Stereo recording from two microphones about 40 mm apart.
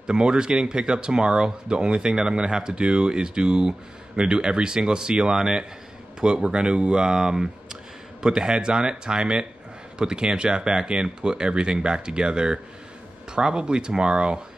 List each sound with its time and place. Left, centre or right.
0.0 s speech: right